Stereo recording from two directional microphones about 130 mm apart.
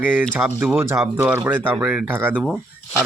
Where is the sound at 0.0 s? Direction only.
15° right (ahead or behind).